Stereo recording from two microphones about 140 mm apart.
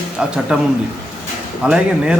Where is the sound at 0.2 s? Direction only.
5° right (ahead or behind).